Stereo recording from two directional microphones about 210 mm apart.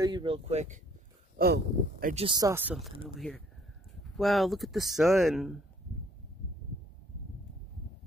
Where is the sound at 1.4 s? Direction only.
45° right (ahead or behind).